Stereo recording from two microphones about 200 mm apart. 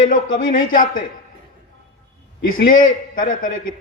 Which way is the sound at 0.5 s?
45° left (ahead or behind).